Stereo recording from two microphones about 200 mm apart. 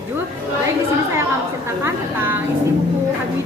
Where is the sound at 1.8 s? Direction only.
10° right (ahead or behind).